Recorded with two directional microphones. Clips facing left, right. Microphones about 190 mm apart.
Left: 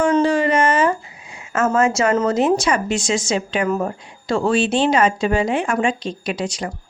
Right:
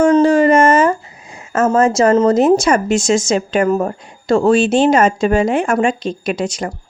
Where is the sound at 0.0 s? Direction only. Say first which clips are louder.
Right 6 dB; 45° right (ahead or behind).